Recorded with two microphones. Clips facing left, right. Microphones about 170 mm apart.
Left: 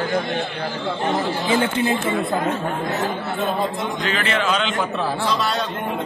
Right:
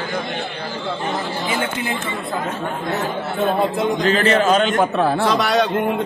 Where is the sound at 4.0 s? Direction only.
35° right (ahead or behind); by 5.7 s 70° right (ahead or behind).